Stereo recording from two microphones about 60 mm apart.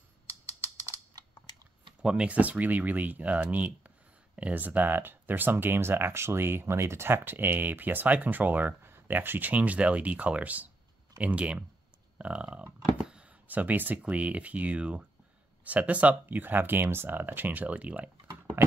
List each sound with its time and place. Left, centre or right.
2.0 s speech: centre